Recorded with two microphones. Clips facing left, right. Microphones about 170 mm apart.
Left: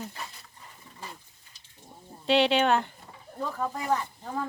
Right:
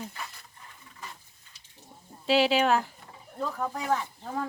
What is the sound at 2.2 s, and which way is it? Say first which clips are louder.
Speech: even; centre (ahead or behind).